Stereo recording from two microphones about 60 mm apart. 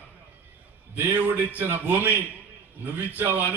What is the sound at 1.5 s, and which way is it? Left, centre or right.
A man's voice, right.